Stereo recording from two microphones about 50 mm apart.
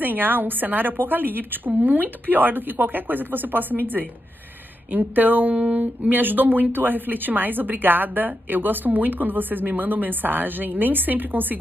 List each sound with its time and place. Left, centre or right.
0.0 s speech: right